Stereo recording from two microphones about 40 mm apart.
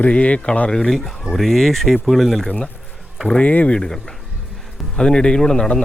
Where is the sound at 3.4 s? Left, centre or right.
Left.